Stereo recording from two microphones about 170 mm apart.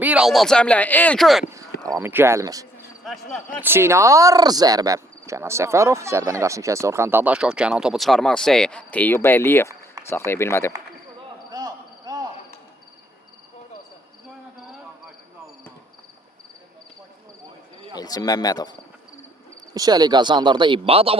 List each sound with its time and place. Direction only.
0.0 s speech: 5° right (ahead or behind)
2.0 s speech: 10° right (ahead or behind)
3.1 s speech: 5° right (ahead or behind)
3.6 s speech: 15° right (ahead or behind); by 10.7 s 15° left (ahead or behind)
11.5 s a sound: 25° right (ahead or behind)
17.9 s speech: 20° left (ahead or behind)
19.7 s speech: 20° right (ahead or behind)